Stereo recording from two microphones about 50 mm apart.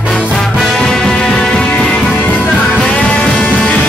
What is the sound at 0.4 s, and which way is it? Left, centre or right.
Music, centre.